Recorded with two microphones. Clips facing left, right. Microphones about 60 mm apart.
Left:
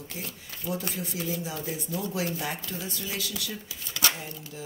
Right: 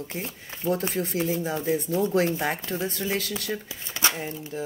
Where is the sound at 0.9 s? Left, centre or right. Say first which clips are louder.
Right 6 dB; right.